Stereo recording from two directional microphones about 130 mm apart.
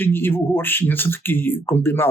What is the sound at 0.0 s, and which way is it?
Speech, 15° left (ahead or behind).